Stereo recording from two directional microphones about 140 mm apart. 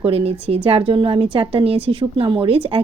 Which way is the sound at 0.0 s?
45° right (ahead or behind).